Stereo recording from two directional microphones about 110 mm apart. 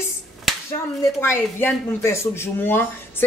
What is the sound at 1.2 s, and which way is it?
Speech, 20° left (ahead or behind).